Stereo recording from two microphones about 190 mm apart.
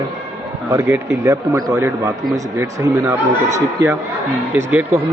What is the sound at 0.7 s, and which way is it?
A man's voice, 15° right (ahead or behind).